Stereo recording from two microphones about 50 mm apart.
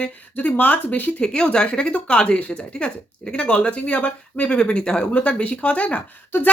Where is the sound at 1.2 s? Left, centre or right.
Centre.